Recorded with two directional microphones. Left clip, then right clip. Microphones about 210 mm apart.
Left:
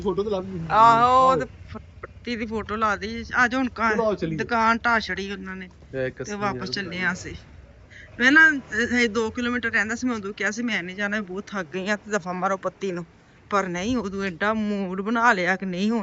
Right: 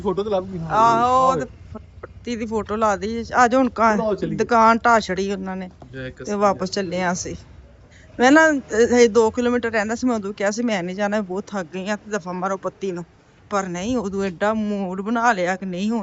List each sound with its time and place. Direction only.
0.2 s speech: 30° right (ahead or behind)
0.7 s a man's voice: 15° right (ahead or behind); by 5.5 s 35° right (ahead or behind)
5.9 s speech: 30° left (ahead or behind)
6.3 s a man's voice: 35° right (ahead or behind); by 16.0 s 15° right (ahead or behind)